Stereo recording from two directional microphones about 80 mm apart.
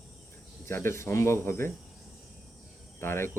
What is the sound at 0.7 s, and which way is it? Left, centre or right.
Speech, left.